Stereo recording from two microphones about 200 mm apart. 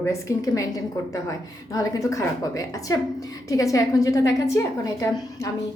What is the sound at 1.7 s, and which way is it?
Speech, 15° left (ahead or behind).